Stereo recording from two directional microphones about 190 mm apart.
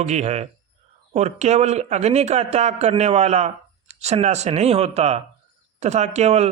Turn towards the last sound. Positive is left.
turn(degrees=-35)  # may be behind; listen again after turning